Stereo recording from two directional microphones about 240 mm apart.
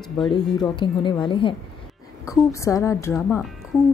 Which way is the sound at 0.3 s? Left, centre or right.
Centre.